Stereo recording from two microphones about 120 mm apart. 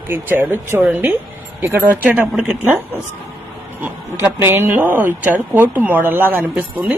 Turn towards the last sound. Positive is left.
turn(degrees=-15)  # may be behind; listen again after turning